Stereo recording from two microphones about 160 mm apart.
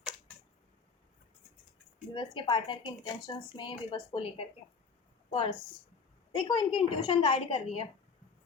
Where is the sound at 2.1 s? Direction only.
30° left (ahead or behind).